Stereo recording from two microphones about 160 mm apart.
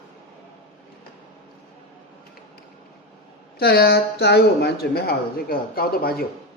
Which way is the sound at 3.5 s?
80° left.